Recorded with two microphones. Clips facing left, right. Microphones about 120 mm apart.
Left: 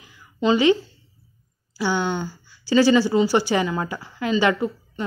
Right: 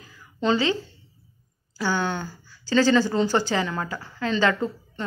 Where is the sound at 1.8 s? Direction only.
15° left (ahead or behind).